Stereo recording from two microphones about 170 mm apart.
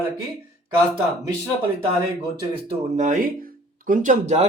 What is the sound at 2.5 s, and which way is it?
Speech, 45° right (ahead or behind).